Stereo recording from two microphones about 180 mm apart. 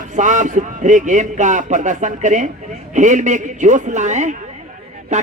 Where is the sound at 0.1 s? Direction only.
45° right (ahead or behind).